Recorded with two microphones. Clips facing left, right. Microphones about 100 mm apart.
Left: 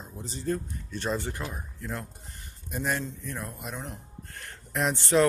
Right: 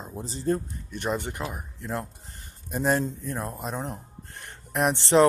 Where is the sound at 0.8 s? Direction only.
15° right (ahead or behind); by 4.0 s 35° right (ahead or behind).